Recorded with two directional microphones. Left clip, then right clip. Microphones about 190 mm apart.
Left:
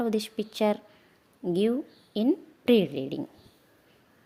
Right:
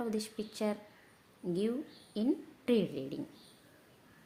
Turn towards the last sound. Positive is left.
turn(degrees=40)  # may be behind; listen again after turning